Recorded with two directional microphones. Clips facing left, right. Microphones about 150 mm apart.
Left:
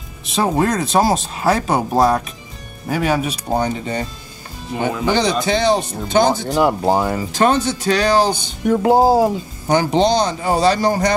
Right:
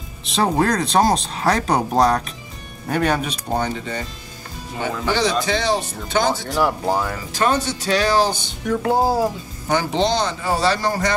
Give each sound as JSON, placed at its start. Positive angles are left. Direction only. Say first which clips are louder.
{"t": 0.2, "sound": "speech", "louder": "left 1 dB", "side_deg": 0}